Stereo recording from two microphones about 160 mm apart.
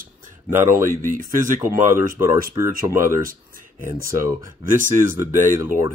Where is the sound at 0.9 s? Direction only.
55° right (ahead or behind).